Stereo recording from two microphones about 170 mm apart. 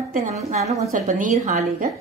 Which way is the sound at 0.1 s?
45° right (ahead or behind).